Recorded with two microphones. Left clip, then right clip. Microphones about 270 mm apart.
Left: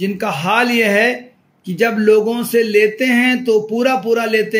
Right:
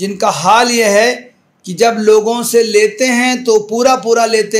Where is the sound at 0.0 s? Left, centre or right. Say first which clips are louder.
Right 7 dB; centre.